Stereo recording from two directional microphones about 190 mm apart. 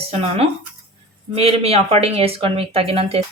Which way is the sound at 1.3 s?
30° right (ahead or behind).